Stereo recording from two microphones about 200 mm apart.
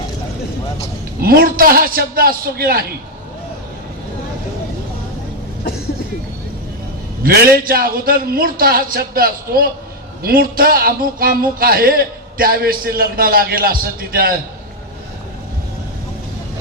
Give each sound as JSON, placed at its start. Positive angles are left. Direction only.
{"t": 1.2, "sound": "a man's voice", "side_deg": -50}
{"t": 7.2, "sound": "a man's voice", "side_deg": -50}